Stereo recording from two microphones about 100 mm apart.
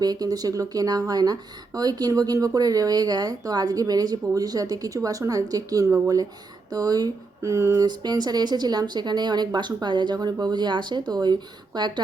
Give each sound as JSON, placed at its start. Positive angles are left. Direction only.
{"t": 0.0, "sound": "speech", "side_deg": -40}
{"t": 7.9, "sound": "speech", "side_deg": -45}